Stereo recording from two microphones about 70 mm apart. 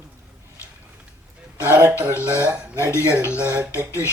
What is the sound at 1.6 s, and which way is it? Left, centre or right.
Speech, right.